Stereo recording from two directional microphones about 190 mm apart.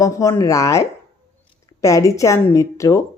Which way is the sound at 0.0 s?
15° left (ahead or behind).